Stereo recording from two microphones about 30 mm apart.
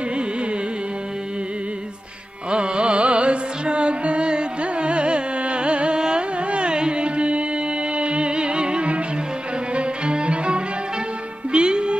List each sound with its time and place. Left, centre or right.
2.5 s music: right
9.8 s string section: right
11.5 s music: right